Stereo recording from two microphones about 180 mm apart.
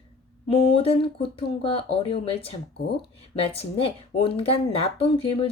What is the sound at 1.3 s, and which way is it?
Speech, 30° left (ahead or behind).